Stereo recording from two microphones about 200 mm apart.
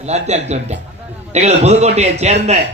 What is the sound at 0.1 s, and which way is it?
A man's voice, 35° right (ahead or behind).